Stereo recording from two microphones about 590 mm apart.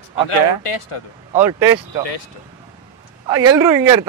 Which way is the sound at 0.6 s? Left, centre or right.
Left.